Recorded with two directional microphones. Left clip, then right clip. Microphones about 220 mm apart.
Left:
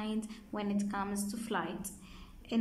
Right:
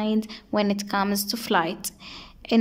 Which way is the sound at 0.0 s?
40° right (ahead or behind).